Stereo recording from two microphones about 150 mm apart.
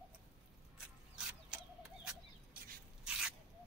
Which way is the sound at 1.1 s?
5° right (ahead or behind).